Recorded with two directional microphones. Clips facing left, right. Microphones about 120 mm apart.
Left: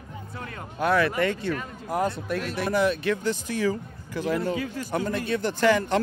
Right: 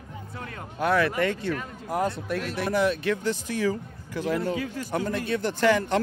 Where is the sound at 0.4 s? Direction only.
25° left (ahead or behind).